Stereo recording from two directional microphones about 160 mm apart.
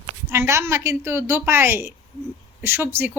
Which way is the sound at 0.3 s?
15° right (ahead or behind).